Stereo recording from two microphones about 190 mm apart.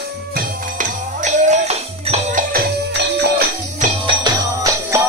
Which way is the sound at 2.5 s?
60° right (ahead or behind).